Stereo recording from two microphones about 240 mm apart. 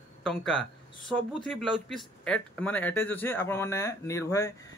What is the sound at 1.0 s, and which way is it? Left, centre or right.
Speech, centre.